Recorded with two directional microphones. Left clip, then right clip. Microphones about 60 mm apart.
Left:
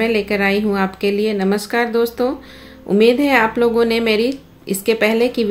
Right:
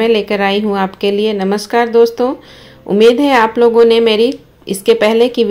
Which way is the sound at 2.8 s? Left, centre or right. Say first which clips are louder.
Right 5 dB; right.